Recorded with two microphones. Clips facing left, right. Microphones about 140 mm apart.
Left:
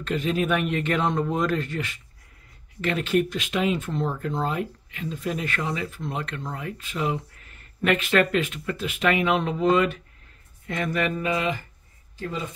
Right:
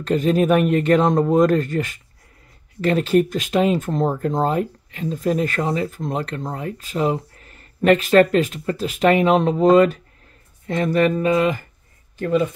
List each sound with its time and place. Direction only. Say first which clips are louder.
0.0 s speech: right 7 dB; 40° right (ahead or behind)
12.2 s speech: right 12 dB; 60° right (ahead or behind)